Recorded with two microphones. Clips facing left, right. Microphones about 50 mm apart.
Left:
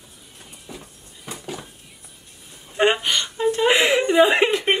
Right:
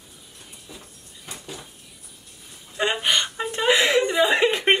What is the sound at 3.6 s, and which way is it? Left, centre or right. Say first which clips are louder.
Speech: even; centre.